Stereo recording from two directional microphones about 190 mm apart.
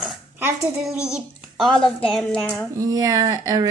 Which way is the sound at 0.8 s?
5° right (ahead or behind).